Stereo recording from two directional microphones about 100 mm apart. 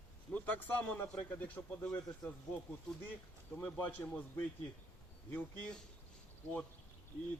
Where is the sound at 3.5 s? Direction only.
15° left (ahead or behind).